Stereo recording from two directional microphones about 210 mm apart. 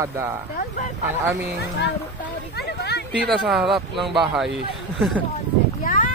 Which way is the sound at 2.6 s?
50° left (ahead or behind).